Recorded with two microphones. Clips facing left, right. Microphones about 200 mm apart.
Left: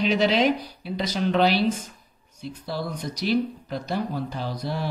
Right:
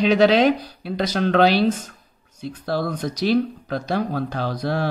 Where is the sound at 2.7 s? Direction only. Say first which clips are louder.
Right 7 dB; 70° right (ahead or behind).